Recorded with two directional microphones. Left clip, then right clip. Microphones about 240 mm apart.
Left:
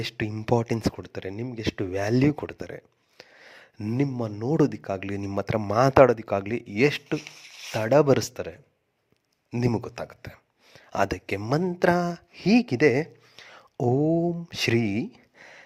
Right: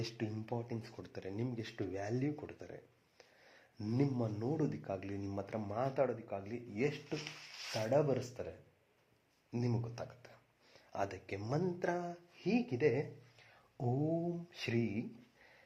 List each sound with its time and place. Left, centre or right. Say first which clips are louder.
0.0 s speech: left 12 dB; left